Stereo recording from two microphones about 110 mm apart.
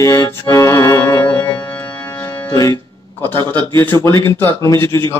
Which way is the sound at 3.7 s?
25° left (ahead or behind).